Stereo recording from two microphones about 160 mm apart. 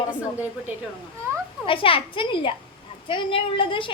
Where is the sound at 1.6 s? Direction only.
35° left (ahead or behind).